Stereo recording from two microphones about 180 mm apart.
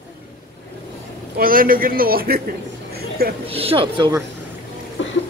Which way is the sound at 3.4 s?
30° right (ahead or behind).